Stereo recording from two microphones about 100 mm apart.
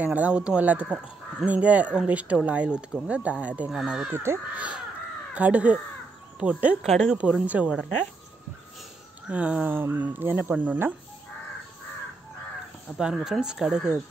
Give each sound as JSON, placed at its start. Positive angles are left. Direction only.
{"t": 0.0, "sound": "speech", "side_deg": -15}
{"t": 4.1, "sound": "speech", "side_deg": -25}
{"t": 4.6, "sound": "speech", "side_deg": -10}
{"t": 6.9, "sound": "speech", "side_deg": 0}
{"t": 7.2, "sound": "speech", "side_deg": -10}
{"t": 9.3, "sound": "speech", "side_deg": -15}
{"t": 12.9, "sound": "speech", "side_deg": -5}